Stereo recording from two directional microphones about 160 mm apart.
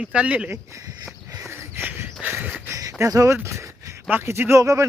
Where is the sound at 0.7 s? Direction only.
20° right (ahead or behind).